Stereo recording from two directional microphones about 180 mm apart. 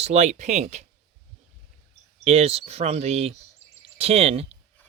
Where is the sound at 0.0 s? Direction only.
40° right (ahead or behind).